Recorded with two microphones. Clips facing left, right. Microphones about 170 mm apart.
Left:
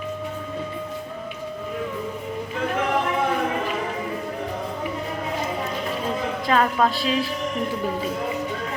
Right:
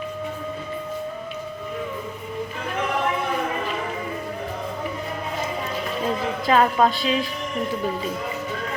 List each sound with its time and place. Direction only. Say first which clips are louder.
6.5 s a woman's voice: right 2 dB; 5° right (ahead or behind)